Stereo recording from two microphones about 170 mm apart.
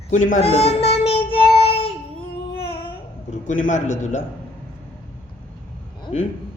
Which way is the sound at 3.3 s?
50° left (ahead or behind).